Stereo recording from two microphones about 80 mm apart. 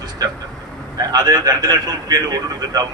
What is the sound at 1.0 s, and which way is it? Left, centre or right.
Speech, right.